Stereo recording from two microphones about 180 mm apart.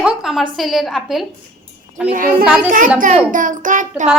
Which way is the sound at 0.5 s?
Centre (ahead or behind).